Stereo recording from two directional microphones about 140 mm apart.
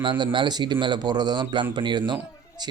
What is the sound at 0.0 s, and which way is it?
A man's voice, 35° right (ahead or behind).